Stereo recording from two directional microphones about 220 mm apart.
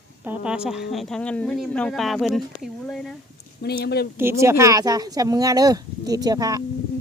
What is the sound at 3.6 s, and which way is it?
Speech, 45° left (ahead or behind).